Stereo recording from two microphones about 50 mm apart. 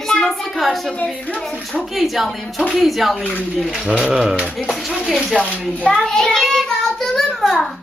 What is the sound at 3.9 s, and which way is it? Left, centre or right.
Speech, centre.